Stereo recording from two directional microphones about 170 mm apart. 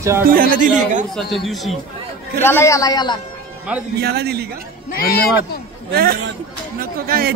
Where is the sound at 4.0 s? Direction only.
70° right (ahead or behind).